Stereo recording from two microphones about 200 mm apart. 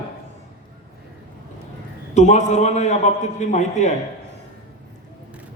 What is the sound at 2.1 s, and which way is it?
A man's voice, 35° left (ahead or behind).